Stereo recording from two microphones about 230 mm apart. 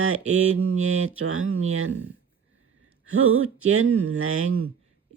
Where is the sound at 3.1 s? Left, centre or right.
Right.